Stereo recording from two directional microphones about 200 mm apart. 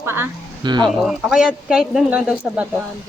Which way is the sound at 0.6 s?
20° right (ahead or behind).